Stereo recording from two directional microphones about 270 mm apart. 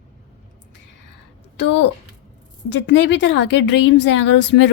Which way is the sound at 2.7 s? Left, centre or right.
Left.